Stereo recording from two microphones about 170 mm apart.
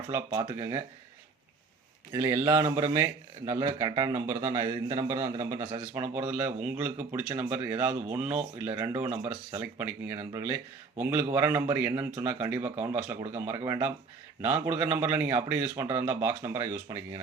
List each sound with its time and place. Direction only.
0.1 s speech: 15° right (ahead or behind)
2.1 s speech: 15° right (ahead or behind)